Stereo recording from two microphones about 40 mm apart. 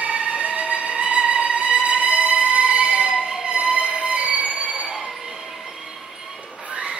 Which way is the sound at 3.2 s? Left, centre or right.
Centre.